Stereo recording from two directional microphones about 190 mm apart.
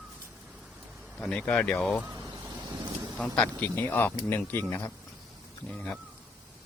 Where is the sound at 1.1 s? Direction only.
5° left (ahead or behind).